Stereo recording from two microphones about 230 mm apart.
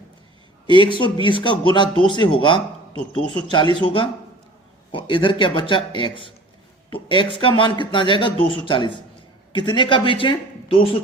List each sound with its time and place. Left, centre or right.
0.7 s speech: left